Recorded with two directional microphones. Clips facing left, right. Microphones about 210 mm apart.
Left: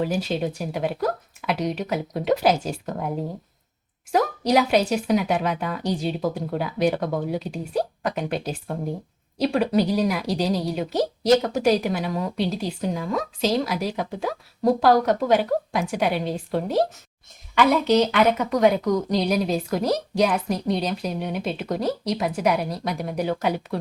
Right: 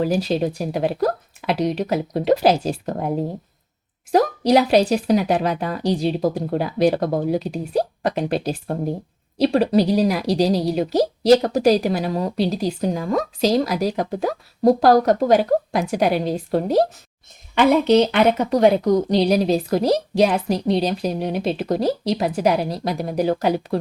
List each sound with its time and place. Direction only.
0.0 s a woman's voice: 35° right (ahead or behind)
4.1 s a woman's voice: 35° right (ahead or behind)
17.5 s a woman's voice: 30° right (ahead or behind)